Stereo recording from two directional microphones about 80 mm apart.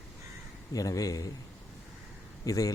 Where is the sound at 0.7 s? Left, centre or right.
Left.